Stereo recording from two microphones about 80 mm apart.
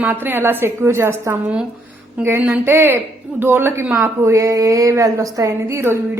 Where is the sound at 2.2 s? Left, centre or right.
Centre.